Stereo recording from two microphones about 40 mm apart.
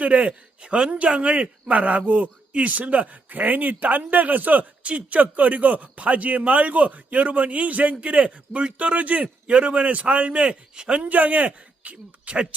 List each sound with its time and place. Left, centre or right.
0.0 s speech: right
4.8 s speech: right
10.5 s a man's voice: right
11.1 s speech: right